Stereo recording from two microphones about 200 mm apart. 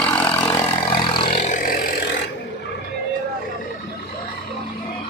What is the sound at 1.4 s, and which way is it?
Vehicle, 40° left (ahead or behind).